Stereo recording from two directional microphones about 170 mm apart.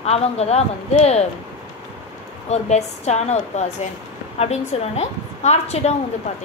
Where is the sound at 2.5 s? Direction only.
40° left (ahead or behind).